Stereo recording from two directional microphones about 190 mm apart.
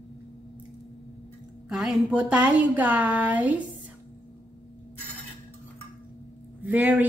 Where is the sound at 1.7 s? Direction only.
Centre (ahead or behind).